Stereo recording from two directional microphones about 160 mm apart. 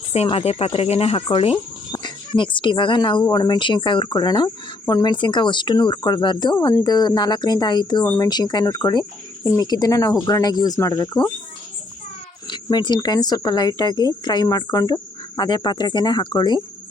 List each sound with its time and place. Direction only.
0.1 s speech: 40° left (ahead or behind); by 11.3 s 25° left (ahead or behind)
12.6 s speech: 25° left (ahead or behind)